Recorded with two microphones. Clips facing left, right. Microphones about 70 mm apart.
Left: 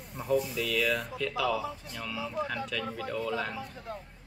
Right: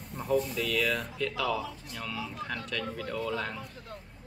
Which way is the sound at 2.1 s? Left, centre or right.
Centre.